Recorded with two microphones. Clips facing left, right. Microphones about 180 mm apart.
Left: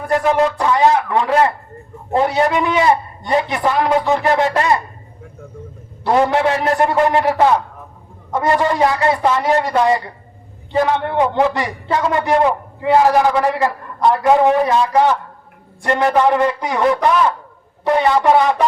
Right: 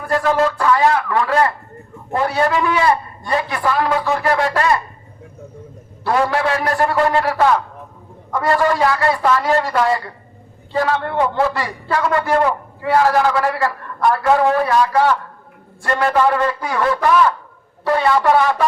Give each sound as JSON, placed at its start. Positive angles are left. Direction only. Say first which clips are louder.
{"t": 0.1, "sound": "a man's voice", "louder": "left 1 dB", "side_deg": 20}
{"t": 6.1, "sound": "a man's voice", "louder": "left 3 dB", "side_deg": 20}